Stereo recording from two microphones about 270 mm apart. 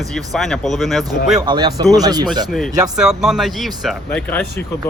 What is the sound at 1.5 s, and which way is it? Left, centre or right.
Speech, centre.